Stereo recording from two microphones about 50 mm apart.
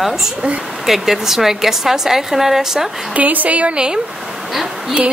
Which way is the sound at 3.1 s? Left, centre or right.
Right.